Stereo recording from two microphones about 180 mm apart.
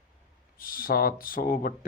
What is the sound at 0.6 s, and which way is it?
Speech, 50° left (ahead or behind).